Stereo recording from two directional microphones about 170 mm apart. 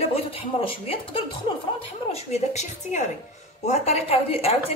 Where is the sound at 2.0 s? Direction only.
40° left (ahead or behind).